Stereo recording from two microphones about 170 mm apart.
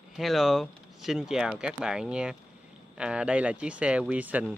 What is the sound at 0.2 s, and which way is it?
Speech, centre (ahead or behind).